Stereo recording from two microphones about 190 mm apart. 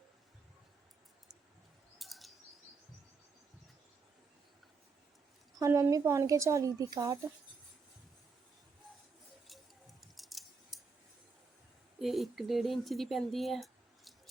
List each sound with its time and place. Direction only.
2.0 s chirp: centre (ahead or behind)
5.5 s a woman's voice: 15° right (ahead or behind)
10.0 s a sound: centre (ahead or behind)
11.9 s speech: centre (ahead or behind)